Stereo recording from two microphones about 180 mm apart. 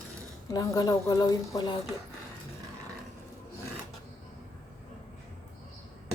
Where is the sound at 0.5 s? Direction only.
20° left (ahead or behind).